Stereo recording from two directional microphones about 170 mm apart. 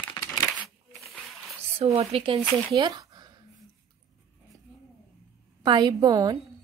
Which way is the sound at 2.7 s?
25° right (ahead or behind).